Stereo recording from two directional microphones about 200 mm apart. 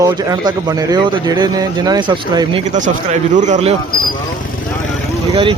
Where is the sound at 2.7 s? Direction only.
40° right (ahead or behind).